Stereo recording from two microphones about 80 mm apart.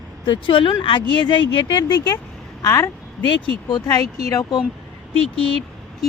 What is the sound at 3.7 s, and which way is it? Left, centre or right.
Speech, left.